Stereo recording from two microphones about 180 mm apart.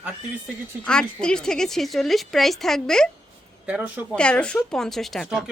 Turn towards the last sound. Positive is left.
turn(degrees=0)  # may be behind; listen again after turning